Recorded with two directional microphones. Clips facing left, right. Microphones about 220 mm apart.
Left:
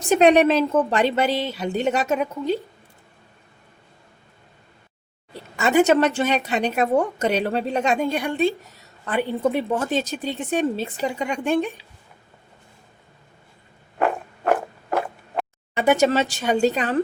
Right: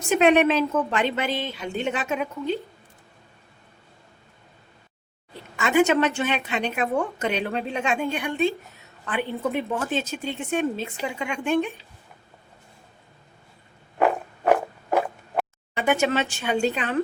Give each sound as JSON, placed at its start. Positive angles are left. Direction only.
{"t": 0.1, "sound": "a woman's voice", "side_deg": 35}
{"t": 5.5, "sound": "a woman's voice", "side_deg": 40}
{"t": 14.0, "sound": "zipper", "side_deg": 0}
{"t": 15.8, "sound": "a woman's voice", "side_deg": 40}